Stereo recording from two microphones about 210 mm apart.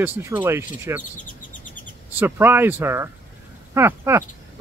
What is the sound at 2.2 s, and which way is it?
Speech, 10° right (ahead or behind).